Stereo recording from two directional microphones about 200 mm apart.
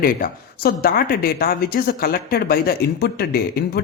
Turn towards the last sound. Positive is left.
turn(degrees=50)  # may be behind; listen again after turning